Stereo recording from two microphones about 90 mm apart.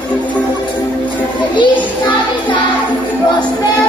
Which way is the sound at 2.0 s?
65° left (ahead or behind).